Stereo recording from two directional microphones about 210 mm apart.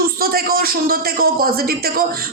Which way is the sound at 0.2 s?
45° right (ahead or behind).